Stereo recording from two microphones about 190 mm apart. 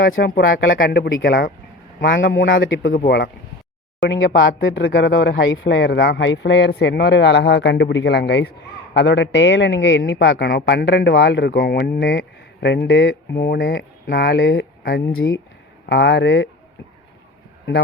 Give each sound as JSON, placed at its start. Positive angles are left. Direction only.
{"t": 0.3, "sound": "speech", "side_deg": 50}
{"t": 0.9, "sound": "speech", "side_deg": 65}
{"t": 2.0, "sound": "a man's voice", "side_deg": 75}
{"t": 4.6, "sound": "speech", "side_deg": 80}
{"t": 15.1, "sound": "speech", "side_deg": 80}
{"t": 15.9, "sound": "speech", "side_deg": 65}